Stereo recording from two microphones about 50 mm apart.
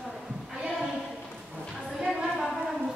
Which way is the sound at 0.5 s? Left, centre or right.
Centre.